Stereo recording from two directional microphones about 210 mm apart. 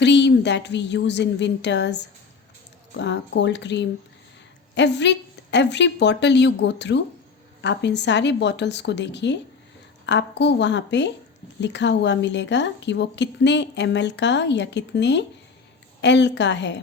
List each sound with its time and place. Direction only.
0.0 s a woman's voice: 55° left (ahead or behind)